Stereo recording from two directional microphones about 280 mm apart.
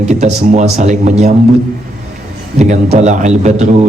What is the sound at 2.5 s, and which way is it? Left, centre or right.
A man's voice, right.